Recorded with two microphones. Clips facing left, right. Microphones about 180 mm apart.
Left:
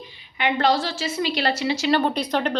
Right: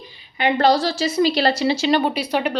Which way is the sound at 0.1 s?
35° right (ahead or behind).